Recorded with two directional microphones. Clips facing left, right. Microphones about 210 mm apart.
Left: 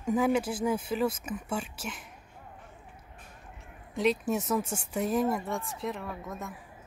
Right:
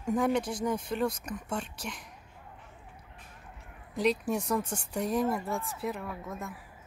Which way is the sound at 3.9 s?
Centre (ahead or behind).